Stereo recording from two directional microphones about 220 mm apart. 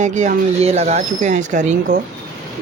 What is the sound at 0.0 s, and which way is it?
Speech, 35° right (ahead or behind).